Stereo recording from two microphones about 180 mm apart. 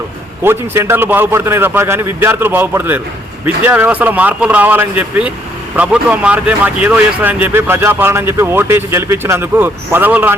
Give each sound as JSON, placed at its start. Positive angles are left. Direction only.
{"t": 0.4, "sound": "speech", "side_deg": -15}